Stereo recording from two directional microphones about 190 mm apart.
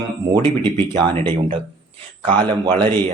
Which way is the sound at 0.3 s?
20° right (ahead or behind).